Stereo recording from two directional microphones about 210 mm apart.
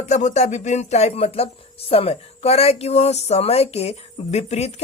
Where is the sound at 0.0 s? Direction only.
35° left (ahead or behind).